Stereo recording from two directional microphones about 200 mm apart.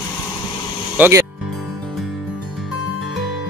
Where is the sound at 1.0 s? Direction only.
15° right (ahead or behind).